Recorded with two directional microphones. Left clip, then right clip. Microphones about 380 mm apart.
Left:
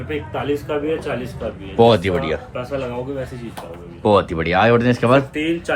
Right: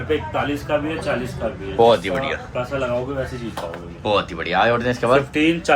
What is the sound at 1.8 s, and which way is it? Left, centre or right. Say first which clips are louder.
Speech: left 1 dB; left.